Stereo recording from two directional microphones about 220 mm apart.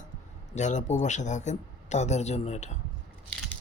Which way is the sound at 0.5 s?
35° left (ahead or behind).